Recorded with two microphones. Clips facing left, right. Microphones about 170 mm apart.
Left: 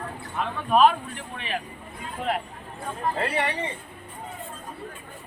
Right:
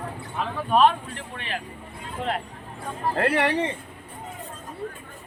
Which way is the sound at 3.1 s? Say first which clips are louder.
Right 6 dB; 65° right (ahead or behind).